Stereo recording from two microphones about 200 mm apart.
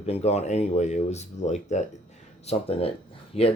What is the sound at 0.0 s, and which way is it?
Speech, 30° left (ahead or behind).